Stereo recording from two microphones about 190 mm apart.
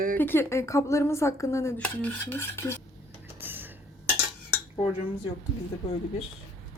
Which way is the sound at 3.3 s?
10° right (ahead or behind).